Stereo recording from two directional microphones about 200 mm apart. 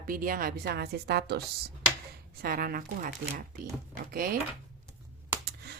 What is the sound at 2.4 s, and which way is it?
Speech, 45° right (ahead or behind).